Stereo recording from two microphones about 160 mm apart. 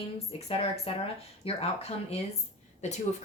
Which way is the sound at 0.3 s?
40° left (ahead or behind).